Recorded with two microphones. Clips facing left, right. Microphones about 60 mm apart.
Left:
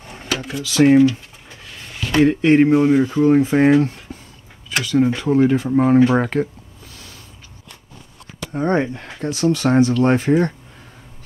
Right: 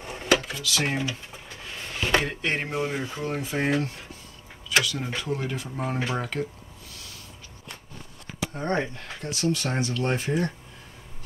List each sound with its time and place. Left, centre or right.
0.0 s drawer open or close: centre
0.6 s speech: left
2.2 s a sound: centre
3.3 s speech: left
8.5 s speech: left